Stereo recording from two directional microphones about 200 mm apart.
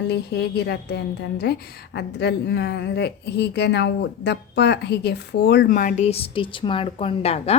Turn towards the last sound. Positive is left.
turn(degrees=30)  # may be behind; listen again after turning